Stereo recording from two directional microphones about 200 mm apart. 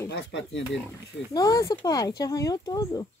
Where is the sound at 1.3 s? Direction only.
20° left (ahead or behind).